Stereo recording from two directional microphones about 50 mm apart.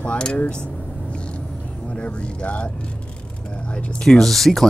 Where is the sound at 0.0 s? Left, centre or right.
Centre.